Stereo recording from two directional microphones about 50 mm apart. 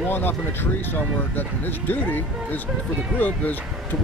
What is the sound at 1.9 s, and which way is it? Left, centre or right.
Speech, left.